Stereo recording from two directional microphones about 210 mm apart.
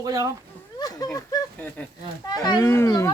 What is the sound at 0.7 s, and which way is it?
Speech, 20° left (ahead or behind).